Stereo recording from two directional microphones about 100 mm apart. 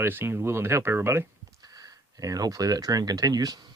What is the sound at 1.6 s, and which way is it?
Speech, 35° right (ahead or behind).